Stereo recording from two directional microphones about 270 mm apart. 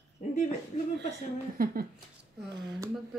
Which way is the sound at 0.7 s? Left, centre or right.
Left.